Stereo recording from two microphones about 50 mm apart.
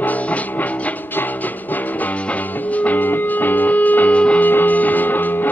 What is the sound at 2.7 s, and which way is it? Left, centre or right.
Music, left.